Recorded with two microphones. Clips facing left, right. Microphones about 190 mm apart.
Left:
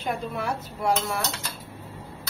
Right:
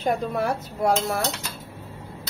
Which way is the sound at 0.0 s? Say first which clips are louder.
Right 5 dB; 45° right (ahead or behind).